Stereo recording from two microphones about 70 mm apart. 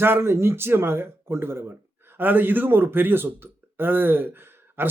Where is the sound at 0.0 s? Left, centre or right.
Right.